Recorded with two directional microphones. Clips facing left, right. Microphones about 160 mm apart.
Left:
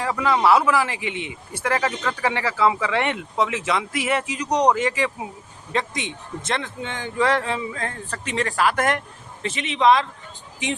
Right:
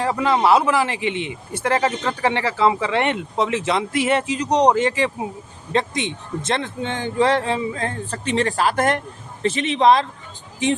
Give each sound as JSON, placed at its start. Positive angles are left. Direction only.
{"t": 0.0, "sound": "a man's voice", "side_deg": -25}